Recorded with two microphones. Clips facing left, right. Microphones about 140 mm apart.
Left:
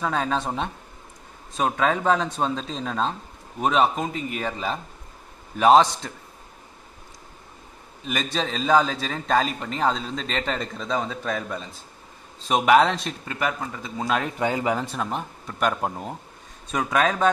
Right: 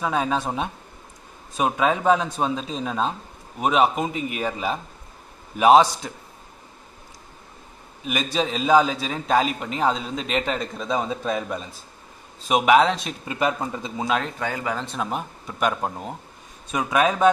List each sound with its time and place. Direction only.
0.0 s a man's voice: 10° right (ahead or behind)
8.0 s a man's voice: 5° right (ahead or behind)
12.4 s speech: 5° right (ahead or behind)
13.3 s speech: 20° right (ahead or behind)
14.0 s speech: centre (ahead or behind)
14.4 s speech: 20° left (ahead or behind)
15.0 s a man's voice: 5° right (ahead or behind)